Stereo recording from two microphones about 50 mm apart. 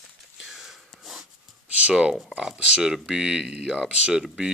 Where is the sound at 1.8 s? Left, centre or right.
Right.